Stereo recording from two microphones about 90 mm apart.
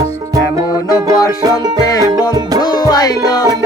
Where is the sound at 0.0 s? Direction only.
40° right (ahead or behind).